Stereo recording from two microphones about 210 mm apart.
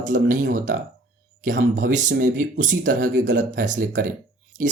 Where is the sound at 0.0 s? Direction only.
40° right (ahead or behind).